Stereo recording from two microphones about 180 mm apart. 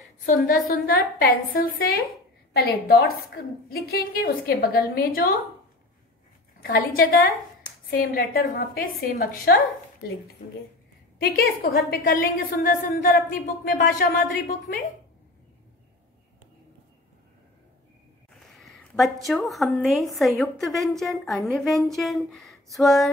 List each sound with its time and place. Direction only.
0.5 s a woman's voice: 50° left (ahead or behind)
6.6 s a woman's voice: 55° left (ahead or behind)
11.1 s a woman's voice: 55° left (ahead or behind)
18.6 s a sound: centre (ahead or behind)
19.2 s a woman's voice: centre (ahead or behind)